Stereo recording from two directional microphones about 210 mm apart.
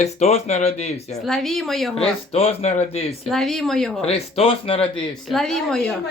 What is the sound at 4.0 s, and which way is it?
Speech, 30° left (ahead or behind).